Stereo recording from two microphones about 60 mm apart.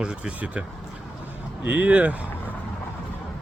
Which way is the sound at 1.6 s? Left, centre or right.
Right.